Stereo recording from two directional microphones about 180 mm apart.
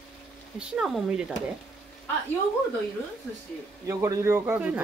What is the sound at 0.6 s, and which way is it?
Speech, centre (ahead or behind).